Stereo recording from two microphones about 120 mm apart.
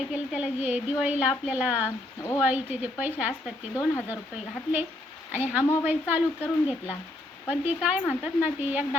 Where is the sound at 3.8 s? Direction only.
20° left (ahead or behind).